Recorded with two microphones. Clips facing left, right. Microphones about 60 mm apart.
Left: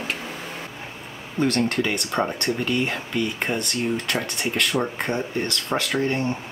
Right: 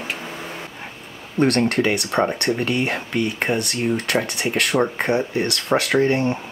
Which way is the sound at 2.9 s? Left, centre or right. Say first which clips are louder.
Right 3 dB; right.